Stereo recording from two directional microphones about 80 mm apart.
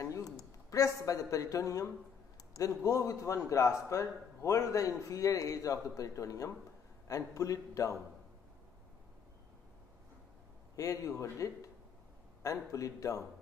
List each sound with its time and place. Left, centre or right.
0.0 s a man's voice: left
10.8 s a man's voice: left